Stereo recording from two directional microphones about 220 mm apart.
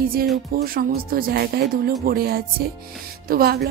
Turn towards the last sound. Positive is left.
turn(degrees=-45)  # may be behind; listen again after turning